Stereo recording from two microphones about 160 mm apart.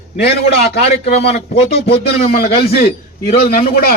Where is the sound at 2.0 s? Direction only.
85° left.